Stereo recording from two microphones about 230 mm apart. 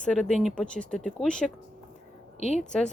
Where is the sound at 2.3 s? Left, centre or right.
Left.